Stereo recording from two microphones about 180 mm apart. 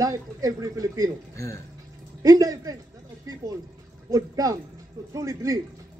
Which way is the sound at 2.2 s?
20° right (ahead or behind).